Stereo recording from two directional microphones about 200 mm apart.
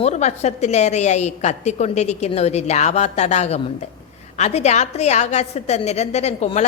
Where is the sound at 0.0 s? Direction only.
35° left (ahead or behind).